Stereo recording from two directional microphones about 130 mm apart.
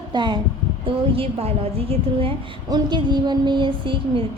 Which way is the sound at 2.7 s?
35° right (ahead or behind).